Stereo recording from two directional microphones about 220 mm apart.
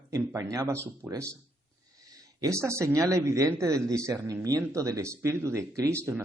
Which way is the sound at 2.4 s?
15° right (ahead or behind).